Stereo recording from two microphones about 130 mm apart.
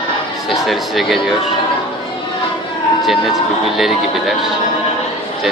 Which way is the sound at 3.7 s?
Centre (ahead or behind).